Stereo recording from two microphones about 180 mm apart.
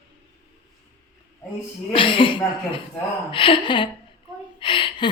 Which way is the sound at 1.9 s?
30° left (ahead or behind).